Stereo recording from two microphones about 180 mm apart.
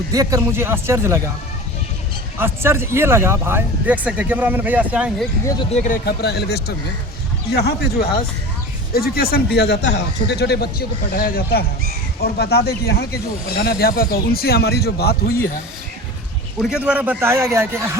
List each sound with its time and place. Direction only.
0.1 s speech: 20° right (ahead or behind)
2.4 s speech: 15° right (ahead or behind)
5.7 s speech: 45° left (ahead or behind)
6.1 s speech: 65° left (ahead or behind)
16.6 s speech: 5° right (ahead or behind)